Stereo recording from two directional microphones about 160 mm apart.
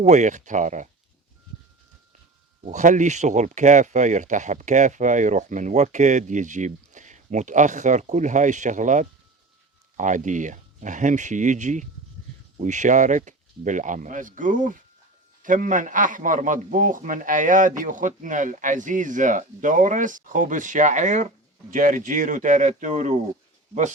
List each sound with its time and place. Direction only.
0.0 s speech: 45° right (ahead or behind)
2.6 s speech: 50° right (ahead or behind)